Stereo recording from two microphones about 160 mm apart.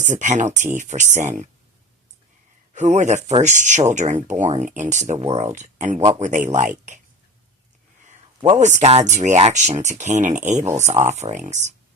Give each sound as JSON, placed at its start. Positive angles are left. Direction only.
{"t": 0.0, "sound": "speech", "side_deg": -50}
{"t": 2.7, "sound": "speech", "side_deg": -50}
{"t": 8.5, "sound": "speech", "side_deg": -50}
{"t": 10.6, "sound": "speech", "side_deg": -15}
{"t": 11.1, "sound": "speech", "side_deg": -45}